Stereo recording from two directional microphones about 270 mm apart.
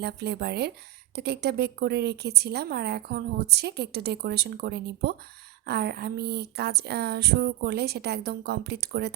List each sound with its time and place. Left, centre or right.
0.0 s speech: right